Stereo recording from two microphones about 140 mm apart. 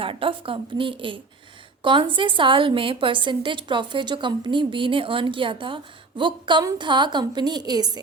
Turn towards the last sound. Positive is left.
turn(degrees=-30)  # may be behind; listen again after turning